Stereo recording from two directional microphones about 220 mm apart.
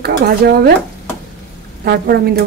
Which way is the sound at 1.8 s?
45° right (ahead or behind).